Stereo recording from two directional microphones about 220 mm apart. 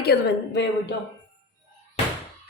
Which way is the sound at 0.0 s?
50° left (ahead or behind).